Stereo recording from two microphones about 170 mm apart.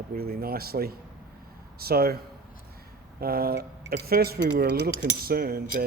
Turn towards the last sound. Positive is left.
turn(degrees=-60)  # may be behind; listen again after turning